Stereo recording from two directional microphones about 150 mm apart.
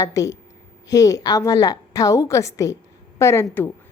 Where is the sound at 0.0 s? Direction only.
20° left (ahead or behind).